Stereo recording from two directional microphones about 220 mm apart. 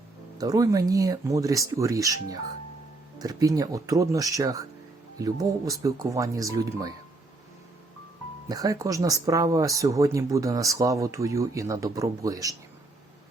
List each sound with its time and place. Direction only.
0.3 s speech: 15° right (ahead or behind)
8.4 s speech: 15° right (ahead or behind)